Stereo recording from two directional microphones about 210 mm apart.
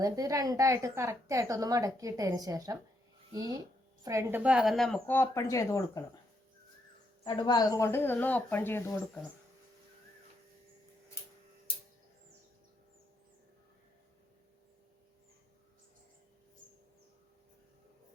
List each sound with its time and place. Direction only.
0.0 s a woman's voice: 15° right (ahead or behind); by 6.0 s 15° left (ahead or behind)
7.3 s speech: 20° left (ahead or behind)